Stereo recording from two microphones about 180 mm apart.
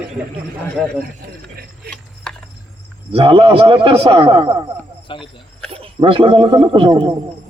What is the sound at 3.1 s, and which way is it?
A man's voice, 30° right (ahead or behind).